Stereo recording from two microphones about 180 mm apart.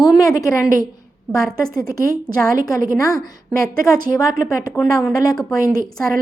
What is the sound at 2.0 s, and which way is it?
Speech, 50° right (ahead or behind).